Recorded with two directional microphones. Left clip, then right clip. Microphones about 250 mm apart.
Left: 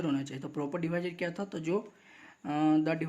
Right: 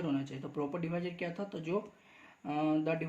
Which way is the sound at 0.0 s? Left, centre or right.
Left.